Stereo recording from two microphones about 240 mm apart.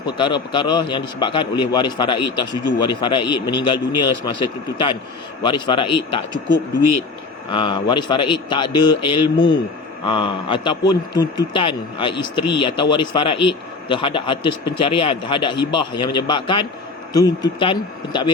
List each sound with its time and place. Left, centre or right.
0.0 s a man's voice: centre
7.5 s a man's voice: centre